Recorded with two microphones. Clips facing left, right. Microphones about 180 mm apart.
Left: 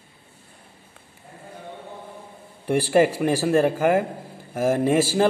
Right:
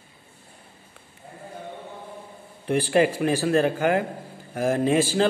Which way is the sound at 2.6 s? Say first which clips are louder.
Left 2 dB; 10° left (ahead or behind).